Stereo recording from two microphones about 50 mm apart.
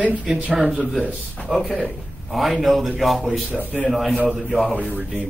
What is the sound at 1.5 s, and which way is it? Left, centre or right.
A man's voice, centre.